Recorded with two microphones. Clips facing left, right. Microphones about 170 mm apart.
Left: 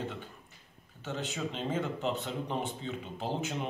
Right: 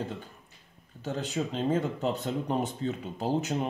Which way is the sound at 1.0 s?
35° right (ahead or behind).